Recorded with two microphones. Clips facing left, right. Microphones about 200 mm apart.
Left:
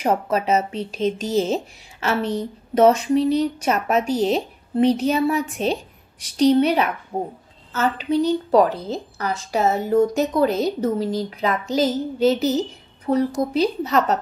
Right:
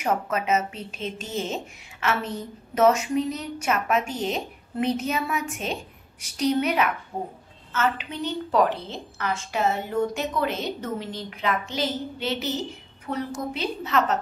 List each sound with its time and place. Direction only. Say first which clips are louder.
0.0 s a woman's voice: left 5 dB; 35° left (ahead or behind)